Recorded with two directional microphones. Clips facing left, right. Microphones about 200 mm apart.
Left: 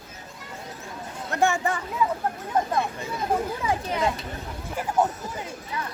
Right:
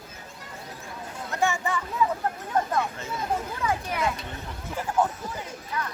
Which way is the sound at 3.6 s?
25° left (ahead or behind).